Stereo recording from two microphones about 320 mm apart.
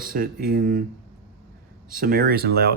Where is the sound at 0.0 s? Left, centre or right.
Right.